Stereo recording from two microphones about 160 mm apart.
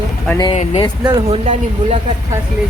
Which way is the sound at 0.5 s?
40° left (ahead or behind).